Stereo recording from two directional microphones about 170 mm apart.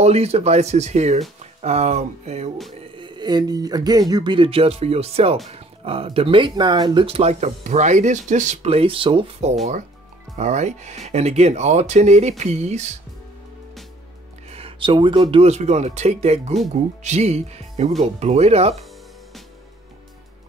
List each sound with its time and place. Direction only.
0.0 s speech: 40° right (ahead or behind)
2.9 s speech: 25° right (ahead or behind)
14.5 s music: 30° right (ahead or behind)
15.3 s speech: 40° right (ahead or behind)